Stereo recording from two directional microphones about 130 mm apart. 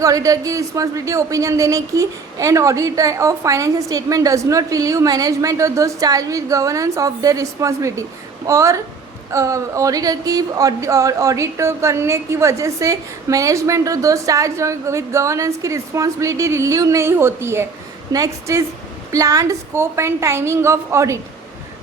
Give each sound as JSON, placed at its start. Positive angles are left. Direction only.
{"t": 0.0, "sound": "speech", "side_deg": -25}